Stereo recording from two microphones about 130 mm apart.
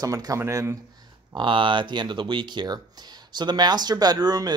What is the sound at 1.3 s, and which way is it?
Speech, 40° right (ahead or behind).